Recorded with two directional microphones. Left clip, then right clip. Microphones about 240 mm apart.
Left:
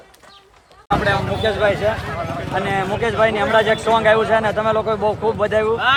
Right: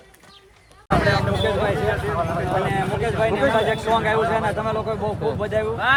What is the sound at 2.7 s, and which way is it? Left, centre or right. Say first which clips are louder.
A man's voice: left 3 dB; left.